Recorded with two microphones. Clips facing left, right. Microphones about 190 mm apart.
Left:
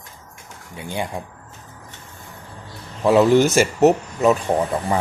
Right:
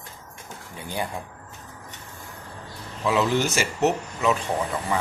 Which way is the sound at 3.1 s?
45° left (ahead or behind).